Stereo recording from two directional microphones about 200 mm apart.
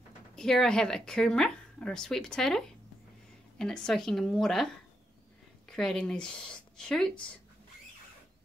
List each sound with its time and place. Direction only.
0.4 s a woman's voice: 5° left (ahead or behind)
5.7 s a woman's voice: centre (ahead or behind)